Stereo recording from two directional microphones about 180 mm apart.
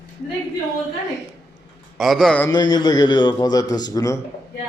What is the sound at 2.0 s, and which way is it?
Speech, centre (ahead or behind).